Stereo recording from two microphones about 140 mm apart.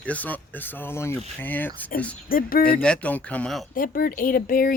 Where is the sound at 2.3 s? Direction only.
90° left.